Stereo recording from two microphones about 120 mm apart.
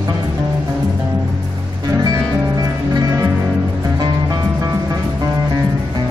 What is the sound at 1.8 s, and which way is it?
Music, 30° right (ahead or behind).